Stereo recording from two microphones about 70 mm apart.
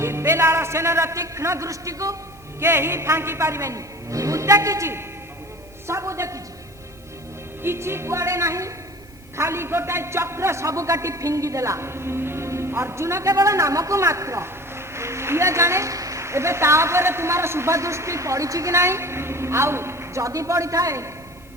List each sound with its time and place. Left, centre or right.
0.0 s a man's voice: right
2.6 s a man's voice: right
7.6 s a man's voice: right